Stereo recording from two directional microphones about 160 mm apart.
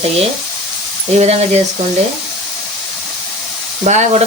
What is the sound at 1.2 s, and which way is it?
Frying, 40° right (ahead or behind).